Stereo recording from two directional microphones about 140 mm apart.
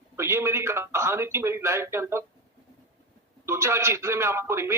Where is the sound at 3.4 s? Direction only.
20° right (ahead or behind).